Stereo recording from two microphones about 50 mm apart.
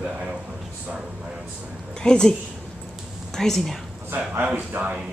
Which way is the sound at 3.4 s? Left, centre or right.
Centre.